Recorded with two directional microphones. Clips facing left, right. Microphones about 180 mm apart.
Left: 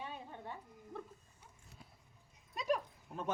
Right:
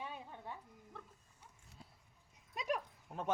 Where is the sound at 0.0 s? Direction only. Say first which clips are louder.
Left 1 dB; 5° right (ahead or behind).